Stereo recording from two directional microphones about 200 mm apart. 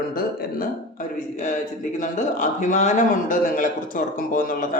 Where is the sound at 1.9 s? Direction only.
40° left (ahead or behind).